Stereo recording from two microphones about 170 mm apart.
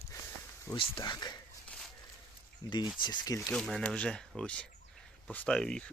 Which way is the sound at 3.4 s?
Centre (ahead or behind).